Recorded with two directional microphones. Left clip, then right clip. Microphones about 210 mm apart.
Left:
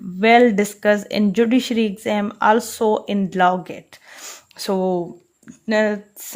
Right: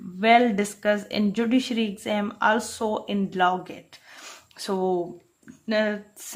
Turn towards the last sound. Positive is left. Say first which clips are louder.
# left 6 dB
turn(degrees=35)  # may be behind; listen again after turning